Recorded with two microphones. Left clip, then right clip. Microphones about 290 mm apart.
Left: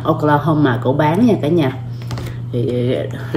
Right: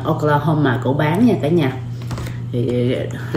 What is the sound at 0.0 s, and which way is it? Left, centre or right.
Speech, centre.